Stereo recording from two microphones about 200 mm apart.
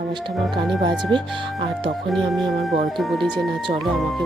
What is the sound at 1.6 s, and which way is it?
Speech, 25° right (ahead or behind).